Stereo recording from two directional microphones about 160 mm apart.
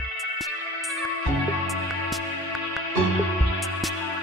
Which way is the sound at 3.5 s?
Centre (ahead or behind).